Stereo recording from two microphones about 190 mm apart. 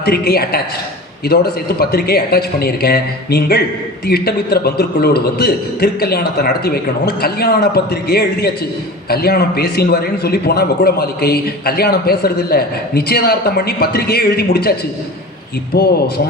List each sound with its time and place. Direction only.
0.0 s a man's voice: 55° left (ahead or behind)
15.7 s a man's voice: 55° left (ahead or behind)